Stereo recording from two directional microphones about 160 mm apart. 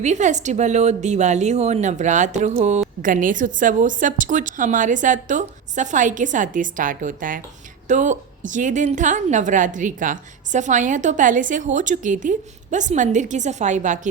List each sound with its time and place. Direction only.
0.0 s a woman's voice: 50° right (ahead or behind)
3.0 s a woman's voice: 55° right (ahead or behind)